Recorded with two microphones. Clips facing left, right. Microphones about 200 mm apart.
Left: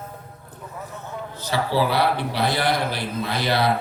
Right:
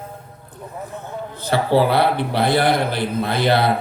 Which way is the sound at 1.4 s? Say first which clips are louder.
Right 5 dB; 55° right (ahead or behind).